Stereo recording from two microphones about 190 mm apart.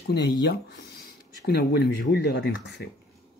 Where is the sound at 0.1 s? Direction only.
60° left (ahead or behind).